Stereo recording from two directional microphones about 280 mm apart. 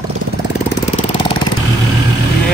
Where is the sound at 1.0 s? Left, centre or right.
Centre.